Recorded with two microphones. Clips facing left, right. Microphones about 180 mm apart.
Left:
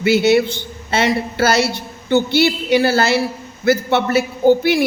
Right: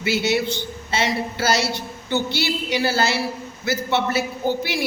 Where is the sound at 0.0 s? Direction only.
55° left (ahead or behind).